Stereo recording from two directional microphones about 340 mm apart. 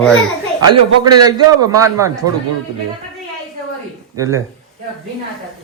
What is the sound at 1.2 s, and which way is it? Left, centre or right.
A man's voice, centre.